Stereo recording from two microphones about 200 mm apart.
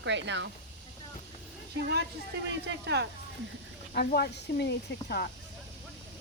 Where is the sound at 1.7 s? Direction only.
55° right (ahead or behind).